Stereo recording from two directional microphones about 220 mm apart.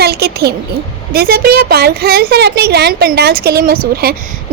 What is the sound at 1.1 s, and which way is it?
A woman's voice, 45° right (ahead or behind).